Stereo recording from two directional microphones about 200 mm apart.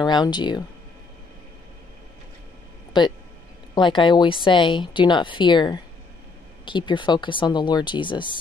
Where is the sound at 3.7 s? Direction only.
25° left (ahead or behind).